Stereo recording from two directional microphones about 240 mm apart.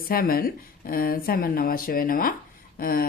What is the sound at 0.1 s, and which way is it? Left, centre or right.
Speech, left.